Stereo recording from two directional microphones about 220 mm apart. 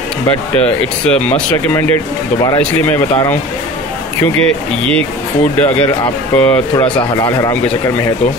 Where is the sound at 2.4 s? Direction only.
15° left (ahead or behind).